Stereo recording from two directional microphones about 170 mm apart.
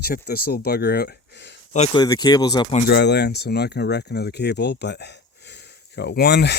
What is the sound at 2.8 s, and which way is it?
Speech, 80° left.